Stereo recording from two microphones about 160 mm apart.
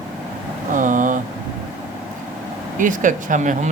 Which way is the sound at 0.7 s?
55° right (ahead or behind).